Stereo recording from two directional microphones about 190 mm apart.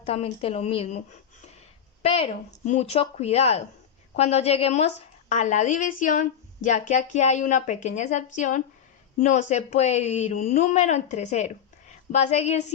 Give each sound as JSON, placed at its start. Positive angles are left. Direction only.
{"t": 0.0, "sound": "a woman's voice", "side_deg": 35}